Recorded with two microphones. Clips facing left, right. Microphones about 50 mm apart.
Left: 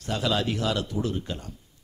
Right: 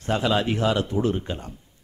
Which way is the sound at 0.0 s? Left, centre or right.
Right.